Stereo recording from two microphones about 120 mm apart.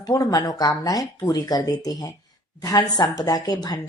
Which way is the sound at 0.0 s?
30° left (ahead or behind).